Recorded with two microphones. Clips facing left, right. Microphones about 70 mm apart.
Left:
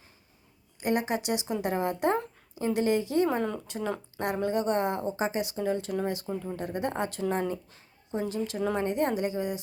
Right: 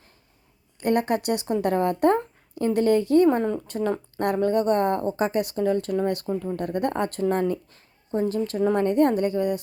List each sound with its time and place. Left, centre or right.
0.8 s a woman's voice: right